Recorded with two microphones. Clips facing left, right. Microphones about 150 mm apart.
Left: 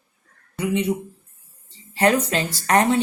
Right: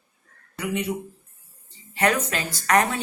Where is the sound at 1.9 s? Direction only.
30° left (ahead or behind).